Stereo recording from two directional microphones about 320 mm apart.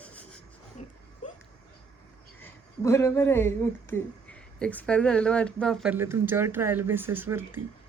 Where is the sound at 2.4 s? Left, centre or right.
Centre.